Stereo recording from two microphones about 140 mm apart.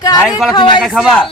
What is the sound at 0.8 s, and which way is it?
Speech, centre (ahead or behind).